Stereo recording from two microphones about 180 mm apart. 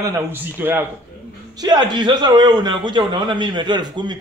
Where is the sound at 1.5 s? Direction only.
20° right (ahead or behind).